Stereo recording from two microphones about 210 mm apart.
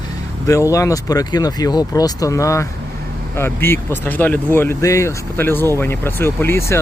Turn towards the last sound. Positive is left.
turn(degrees=10)  # may be behind; listen again after turning